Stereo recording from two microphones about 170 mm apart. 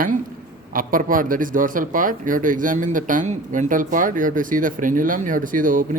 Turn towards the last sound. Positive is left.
turn(degrees=-55)  # may be behind; listen again after turning